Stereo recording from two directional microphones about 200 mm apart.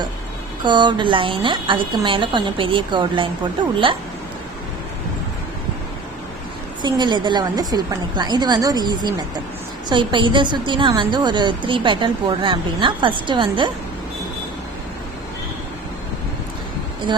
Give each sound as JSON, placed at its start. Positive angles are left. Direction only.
{"t": 0.6, "sound": "a woman's voice", "side_deg": -25}
{"t": 6.8, "sound": "a woman's voice", "side_deg": -20}